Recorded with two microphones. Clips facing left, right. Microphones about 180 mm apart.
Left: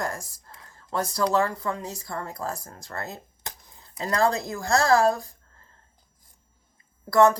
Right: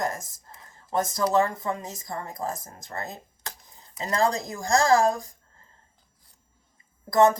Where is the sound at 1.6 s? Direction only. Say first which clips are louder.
Even; 20° right (ahead or behind).